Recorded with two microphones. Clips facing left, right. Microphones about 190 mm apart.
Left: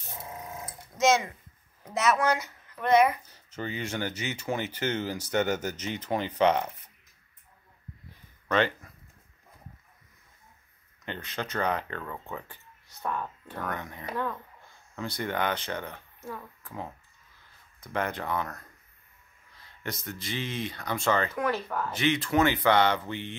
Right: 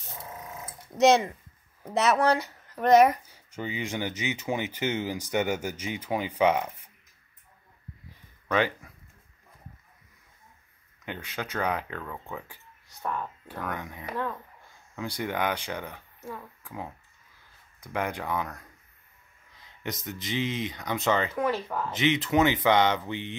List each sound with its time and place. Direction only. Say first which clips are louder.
0.2 s sewing machine: left 1 dB; 10° left (ahead or behind)
0.9 s speech: right 4 dB; 35° right (ahead or behind)
3.3 s speech: even; 10° right (ahead or behind)
8.5 s speech: even; 10° right (ahead or behind)
11.1 s speech: even; 10° right (ahead or behind)
21.4 s speech: right 1 dB; 5° right (ahead or behind)
21.9 s speech: right 2 dB; 20° right (ahead or behind)